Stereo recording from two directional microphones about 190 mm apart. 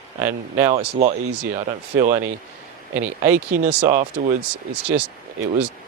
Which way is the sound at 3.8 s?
40° right (ahead or behind).